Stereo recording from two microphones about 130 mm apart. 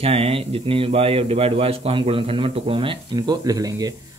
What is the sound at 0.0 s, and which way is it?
A man's voice, 50° right (ahead or behind).